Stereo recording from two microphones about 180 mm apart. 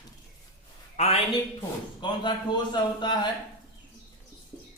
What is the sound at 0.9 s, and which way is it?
A man's voice, 35° left (ahead or behind).